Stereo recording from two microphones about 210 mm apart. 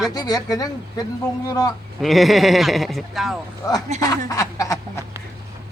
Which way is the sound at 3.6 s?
20° left (ahead or behind).